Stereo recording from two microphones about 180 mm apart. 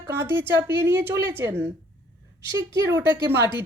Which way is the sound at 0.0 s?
15° right (ahead or behind).